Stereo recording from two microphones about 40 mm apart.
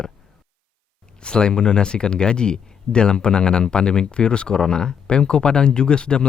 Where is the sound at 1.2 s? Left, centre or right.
Left.